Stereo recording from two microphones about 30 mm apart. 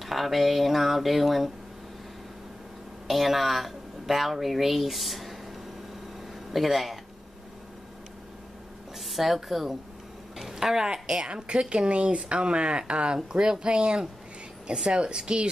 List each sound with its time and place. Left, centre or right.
0.0 s speech: centre
3.1 s speech: centre
6.5 s speech: centre
9.1 s a woman's voice: centre; by 15.4 s right